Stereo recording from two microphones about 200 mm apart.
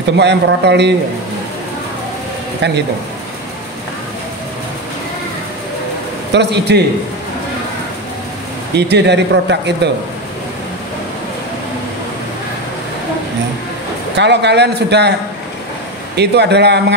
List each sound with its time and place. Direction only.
0.2 s speech: 60° right (ahead or behind)
2.6 s speech: 55° right (ahead or behind)
6.3 s speech: 60° right (ahead or behind)
8.7 s speech: 60° right (ahead or behind)
14.1 s speech: 60° right (ahead or behind)
16.2 s speech: 55° right (ahead or behind)